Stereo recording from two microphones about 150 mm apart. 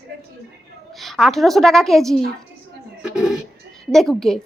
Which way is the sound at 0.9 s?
Centre (ahead or behind).